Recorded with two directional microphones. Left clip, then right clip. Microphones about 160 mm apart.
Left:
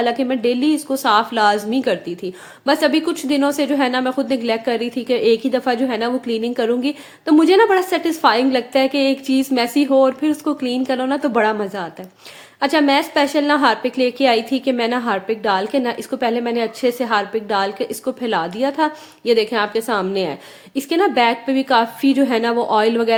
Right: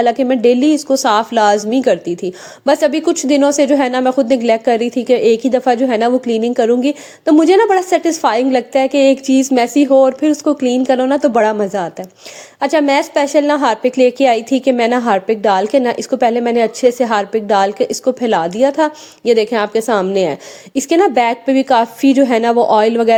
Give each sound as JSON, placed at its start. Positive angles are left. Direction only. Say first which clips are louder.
{"t": 0.0, "sound": "a woman's voice", "louder": "right 6 dB", "side_deg": -35}